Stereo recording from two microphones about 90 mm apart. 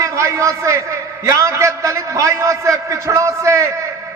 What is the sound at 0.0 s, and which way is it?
A man's voice, 35° right (ahead or behind).